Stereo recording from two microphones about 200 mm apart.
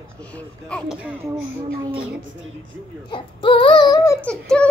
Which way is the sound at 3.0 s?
25° left (ahead or behind).